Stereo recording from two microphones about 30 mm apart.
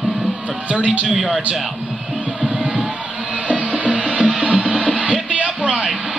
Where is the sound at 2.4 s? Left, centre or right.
Right.